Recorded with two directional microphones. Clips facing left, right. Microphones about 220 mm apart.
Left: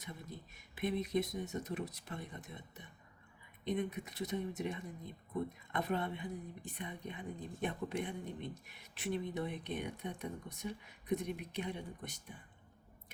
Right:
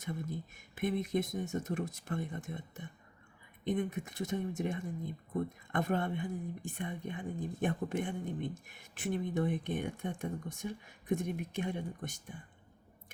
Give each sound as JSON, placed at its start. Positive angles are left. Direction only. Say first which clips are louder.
{"t": 0.0, "sound": "speech", "louder": "right 9 dB", "side_deg": -50}